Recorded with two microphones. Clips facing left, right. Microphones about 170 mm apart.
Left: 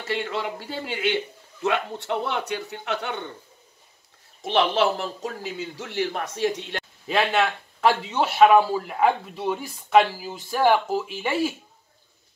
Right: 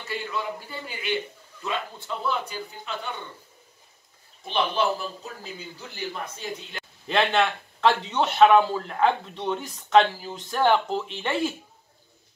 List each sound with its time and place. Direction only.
0.0 s a man's voice: 90° left; by 3.3 s 75° left (ahead or behind)
4.4 s a man's voice: 85° left
7.1 s a man's voice: 5° left (ahead or behind)